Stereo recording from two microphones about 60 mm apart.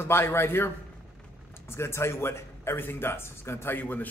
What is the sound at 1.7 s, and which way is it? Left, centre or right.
A man's voice, left.